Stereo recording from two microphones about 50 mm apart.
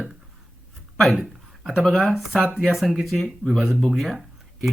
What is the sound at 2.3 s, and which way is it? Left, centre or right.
Speech, centre.